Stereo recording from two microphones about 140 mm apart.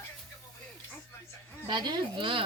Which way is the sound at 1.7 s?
30° right (ahead or behind).